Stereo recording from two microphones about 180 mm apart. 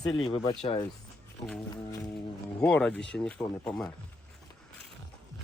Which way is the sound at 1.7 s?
20° left (ahead or behind).